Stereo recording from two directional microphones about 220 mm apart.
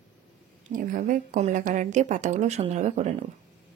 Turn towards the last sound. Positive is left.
turn(degrees=-30)  # may be behind; listen again after turning